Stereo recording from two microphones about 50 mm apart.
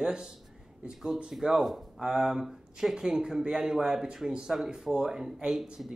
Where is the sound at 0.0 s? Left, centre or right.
Centre.